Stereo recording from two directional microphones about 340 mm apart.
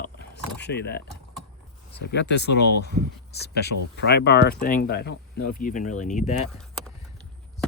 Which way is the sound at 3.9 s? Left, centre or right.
Left.